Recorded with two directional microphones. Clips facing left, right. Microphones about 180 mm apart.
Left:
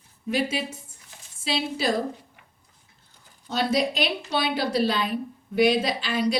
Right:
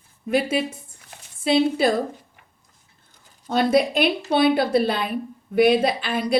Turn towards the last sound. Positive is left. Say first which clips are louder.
# right 2 dB
turn(degrees=-55)  # may be behind; listen again after turning